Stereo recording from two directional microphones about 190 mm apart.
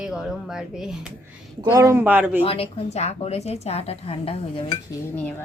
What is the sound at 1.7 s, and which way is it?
Speech, 15° right (ahead or behind).